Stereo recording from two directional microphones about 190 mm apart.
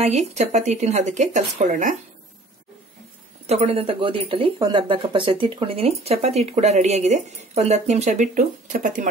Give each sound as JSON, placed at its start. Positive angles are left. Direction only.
{"t": 0.0, "sound": "speech", "side_deg": -35}
{"t": 3.4, "sound": "speech", "side_deg": -35}